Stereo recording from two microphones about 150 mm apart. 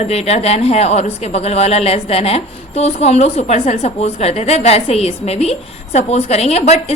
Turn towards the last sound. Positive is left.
turn(degrees=45)  # may be behind; listen again after turning